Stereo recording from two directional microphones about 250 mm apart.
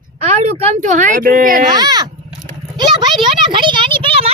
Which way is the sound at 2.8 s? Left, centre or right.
Centre.